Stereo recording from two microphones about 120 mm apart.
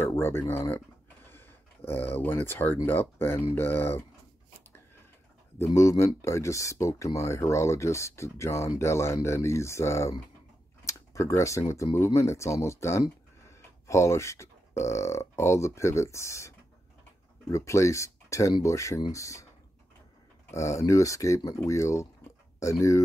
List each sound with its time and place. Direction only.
0.0 s a sound: 20° left (ahead or behind)
2.1 s speech: 15° left (ahead or behind)
5.7 s speech: 25° left (ahead or behind)
10.9 s a sound: 25° left (ahead or behind)
11.7 s speech: 25° left (ahead or behind)
20.5 s speech: 25° left (ahead or behind)